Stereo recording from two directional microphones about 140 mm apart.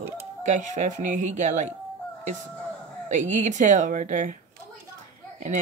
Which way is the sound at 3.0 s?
60° right (ahead or behind).